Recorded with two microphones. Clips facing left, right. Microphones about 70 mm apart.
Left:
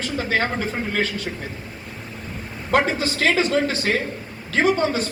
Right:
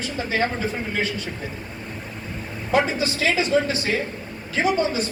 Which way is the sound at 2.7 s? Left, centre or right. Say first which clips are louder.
Left 1 dB; left.